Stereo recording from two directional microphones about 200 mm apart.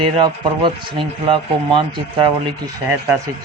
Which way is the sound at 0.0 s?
25° right (ahead or behind).